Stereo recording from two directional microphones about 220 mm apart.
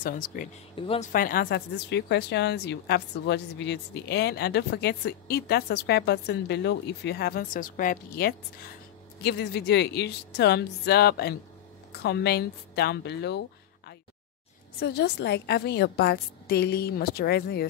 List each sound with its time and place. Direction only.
0.0 s speech: 40° left (ahead or behind)
0.7 s speech: 25° left (ahead or behind)
1.1 s speech: 40° left (ahead or behind)
14.8 s speech: 45° left (ahead or behind)